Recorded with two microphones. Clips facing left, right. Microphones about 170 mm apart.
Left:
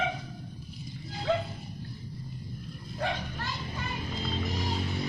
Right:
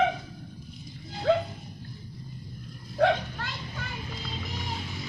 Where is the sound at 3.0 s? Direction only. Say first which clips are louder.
Right 9 dB; 80° right.